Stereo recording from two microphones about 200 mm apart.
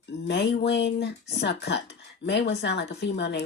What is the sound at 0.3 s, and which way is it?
Speech, 60° left (ahead or behind).